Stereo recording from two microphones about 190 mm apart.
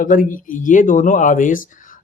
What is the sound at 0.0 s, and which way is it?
Speech, 45° left (ahead or behind).